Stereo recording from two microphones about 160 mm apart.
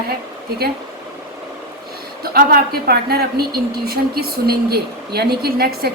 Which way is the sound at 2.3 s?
80° right.